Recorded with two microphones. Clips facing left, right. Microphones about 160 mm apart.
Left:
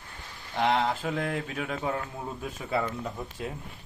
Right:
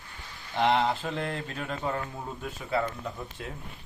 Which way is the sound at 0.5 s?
Centre (ahead or behind).